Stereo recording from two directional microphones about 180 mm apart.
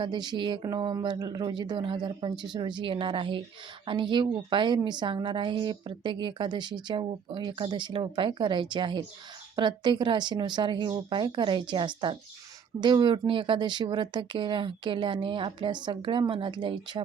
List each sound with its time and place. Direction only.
0.0 s a woman's voice: 25° right (ahead or behind)